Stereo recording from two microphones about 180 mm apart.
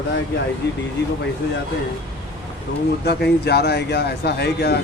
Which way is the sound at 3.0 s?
65° left (ahead or behind).